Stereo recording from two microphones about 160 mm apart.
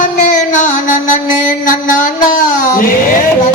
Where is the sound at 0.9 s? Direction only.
55° left (ahead or behind).